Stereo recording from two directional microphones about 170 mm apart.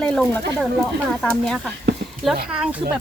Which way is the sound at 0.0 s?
5° left (ahead or behind).